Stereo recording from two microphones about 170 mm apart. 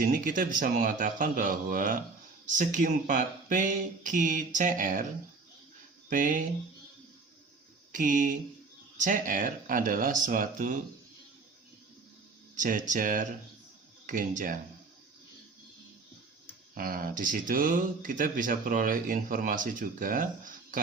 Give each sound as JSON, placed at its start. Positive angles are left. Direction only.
{"t": 0.0, "sound": "speech", "side_deg": -50}
{"t": 6.1, "sound": "speech", "side_deg": -50}
{"t": 7.9, "sound": "speech", "side_deg": -50}
{"t": 12.5, "sound": "speech", "side_deg": -50}
{"t": 16.7, "sound": "speech", "side_deg": -60}